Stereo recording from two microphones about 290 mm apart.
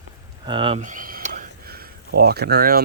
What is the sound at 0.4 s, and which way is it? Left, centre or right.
Speech, centre.